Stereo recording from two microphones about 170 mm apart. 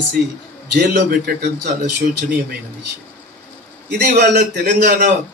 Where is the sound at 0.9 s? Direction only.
80° right.